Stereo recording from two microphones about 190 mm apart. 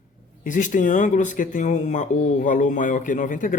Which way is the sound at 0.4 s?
40° left (ahead or behind).